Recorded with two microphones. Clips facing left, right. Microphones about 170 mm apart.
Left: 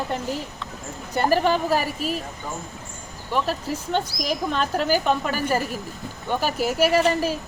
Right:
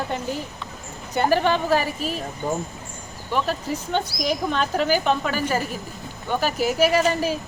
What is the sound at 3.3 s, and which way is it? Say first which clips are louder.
Speech: even; centre (ahead or behind).